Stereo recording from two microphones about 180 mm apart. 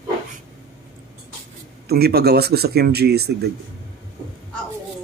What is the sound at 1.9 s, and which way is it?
Speech, 60° right (ahead or behind).